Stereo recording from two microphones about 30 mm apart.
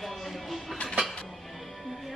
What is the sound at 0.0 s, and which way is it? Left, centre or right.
Music, centre.